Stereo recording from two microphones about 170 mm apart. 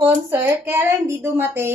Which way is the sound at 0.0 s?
15° right (ahead or behind).